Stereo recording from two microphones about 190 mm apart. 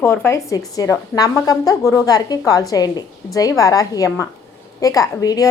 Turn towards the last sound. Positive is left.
turn(degrees=20)  # may be behind; listen again after turning